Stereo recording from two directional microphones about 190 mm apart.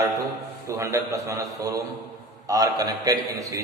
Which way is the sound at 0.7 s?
15° right (ahead or behind).